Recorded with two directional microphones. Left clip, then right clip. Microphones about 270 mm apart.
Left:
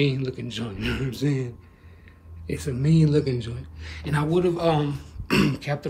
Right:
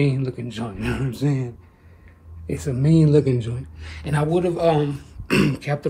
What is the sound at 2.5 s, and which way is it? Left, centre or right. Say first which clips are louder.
Speech: right 5 dB; centre.